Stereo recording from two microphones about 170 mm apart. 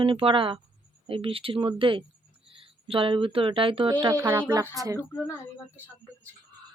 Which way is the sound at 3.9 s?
20° right (ahead or behind).